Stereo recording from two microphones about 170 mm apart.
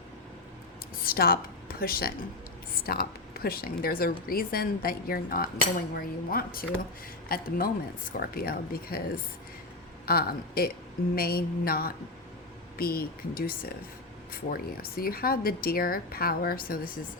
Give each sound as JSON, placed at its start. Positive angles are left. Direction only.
{"t": 1.0, "sound": "a woman's voice", "side_deg": 60}